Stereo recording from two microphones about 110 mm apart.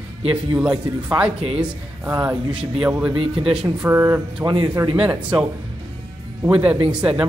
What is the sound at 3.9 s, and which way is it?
Speech, 20° right (ahead or behind).